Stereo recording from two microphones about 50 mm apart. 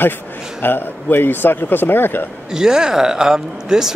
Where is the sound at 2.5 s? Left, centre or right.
Centre.